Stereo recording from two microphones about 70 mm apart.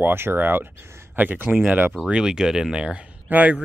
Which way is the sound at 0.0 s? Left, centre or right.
Right.